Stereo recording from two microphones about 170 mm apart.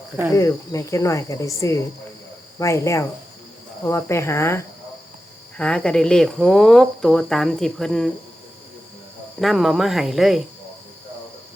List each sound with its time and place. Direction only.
0.3 s speech: 20° left (ahead or behind); by 8.1 s centre (ahead or behind)
9.4 s speech: centre (ahead or behind)